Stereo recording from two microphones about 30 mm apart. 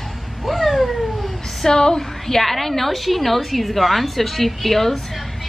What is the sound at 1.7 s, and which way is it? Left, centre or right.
Speech, left.